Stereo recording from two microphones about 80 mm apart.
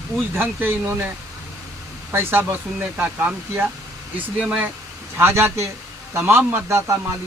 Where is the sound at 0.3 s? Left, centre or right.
Right.